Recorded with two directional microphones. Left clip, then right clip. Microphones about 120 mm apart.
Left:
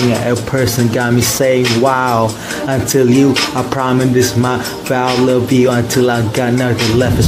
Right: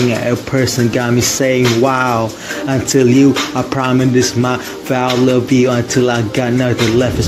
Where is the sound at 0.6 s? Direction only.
35° right (ahead or behind).